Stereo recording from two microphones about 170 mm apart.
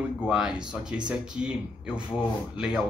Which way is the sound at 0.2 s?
5° right (ahead or behind).